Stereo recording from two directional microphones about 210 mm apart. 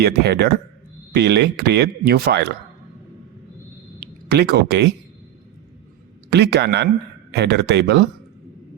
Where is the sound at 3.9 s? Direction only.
50° right (ahead or behind).